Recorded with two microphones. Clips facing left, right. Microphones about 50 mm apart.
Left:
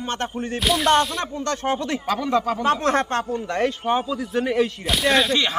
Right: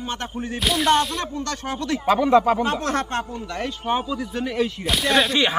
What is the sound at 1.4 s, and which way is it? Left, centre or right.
Speech, left.